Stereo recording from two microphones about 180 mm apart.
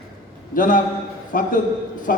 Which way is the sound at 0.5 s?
50° left (ahead or behind).